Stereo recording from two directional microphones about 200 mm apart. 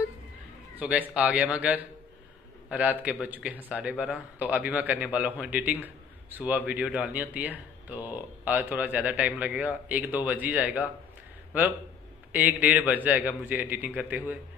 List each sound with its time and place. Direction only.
0.7 s a man's voice: 5° right (ahead or behind)
12.3 s a man's voice: 10° right (ahead or behind)